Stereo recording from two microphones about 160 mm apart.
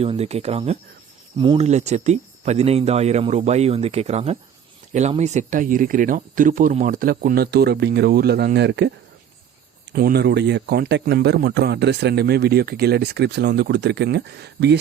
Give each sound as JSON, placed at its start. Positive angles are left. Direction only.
{"t": 0.0, "sound": "speech", "side_deg": -40}
{"t": 9.9, "sound": "a man's voice", "side_deg": -70}